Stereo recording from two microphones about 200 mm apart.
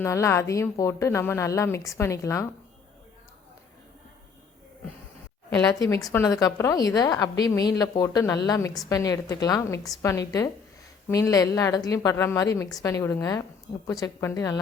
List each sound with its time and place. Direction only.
0.0 s a woman's voice: 15° left (ahead or behind)
6.1 s a woman's voice: 15° left (ahead or behind)